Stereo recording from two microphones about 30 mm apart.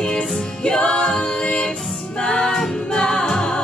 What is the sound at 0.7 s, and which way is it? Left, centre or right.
Music, left.